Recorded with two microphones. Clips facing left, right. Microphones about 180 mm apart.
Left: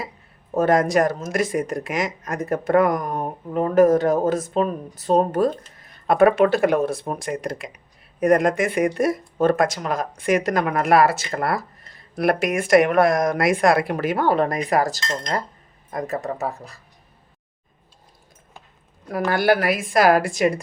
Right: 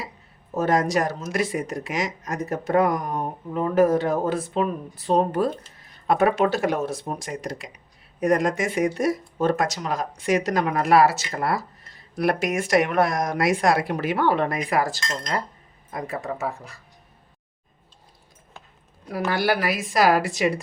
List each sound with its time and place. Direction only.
0.5 s speech: 55° left (ahead or behind)
6.1 s speech: 55° left (ahead or behind); by 15.0 s 40° left (ahead or behind)
15.0 s speech: 20° left (ahead or behind)
15.9 s speech: 45° left (ahead or behind)
19.3 s speech: 50° left (ahead or behind)